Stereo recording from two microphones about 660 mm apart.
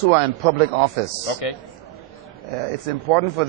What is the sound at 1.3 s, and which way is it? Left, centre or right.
Speech, left.